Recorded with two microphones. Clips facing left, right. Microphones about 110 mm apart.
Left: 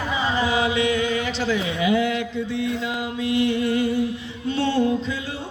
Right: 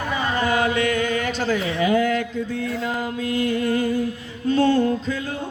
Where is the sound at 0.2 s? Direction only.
50° right (ahead or behind).